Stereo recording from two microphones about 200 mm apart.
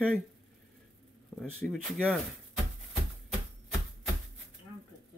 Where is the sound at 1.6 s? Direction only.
Centre (ahead or behind).